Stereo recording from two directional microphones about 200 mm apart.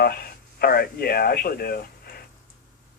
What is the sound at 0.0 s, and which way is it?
Speech, 50° left (ahead or behind).